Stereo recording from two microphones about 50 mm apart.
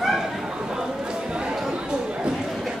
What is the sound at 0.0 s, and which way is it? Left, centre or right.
Chatter, centre.